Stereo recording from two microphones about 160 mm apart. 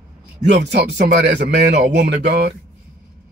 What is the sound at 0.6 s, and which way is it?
Speech, 90° right.